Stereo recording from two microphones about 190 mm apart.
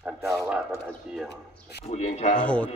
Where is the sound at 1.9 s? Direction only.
35° left (ahead or behind).